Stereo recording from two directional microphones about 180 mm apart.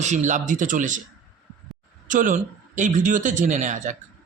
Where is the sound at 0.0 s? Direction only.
40° right (ahead or behind).